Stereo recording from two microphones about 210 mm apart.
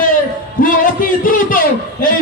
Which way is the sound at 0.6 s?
40° left (ahead or behind).